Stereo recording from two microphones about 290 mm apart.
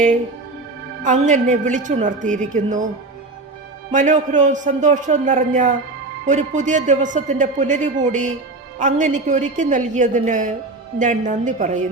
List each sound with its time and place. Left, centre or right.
1.0 s a man's voice: right
3.9 s a man's voice: right